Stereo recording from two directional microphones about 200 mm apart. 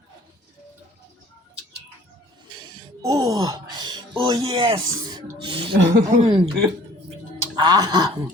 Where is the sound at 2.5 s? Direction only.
20° right (ahead or behind).